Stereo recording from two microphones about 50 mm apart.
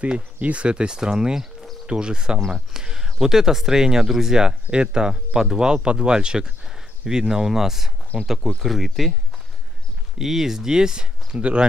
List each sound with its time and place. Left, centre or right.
0.4 s speech: right; by 9.1 s centre
10.1 s speech: centre